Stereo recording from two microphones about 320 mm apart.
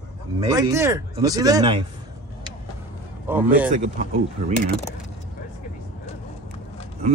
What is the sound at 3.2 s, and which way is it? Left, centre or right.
Speech, centre.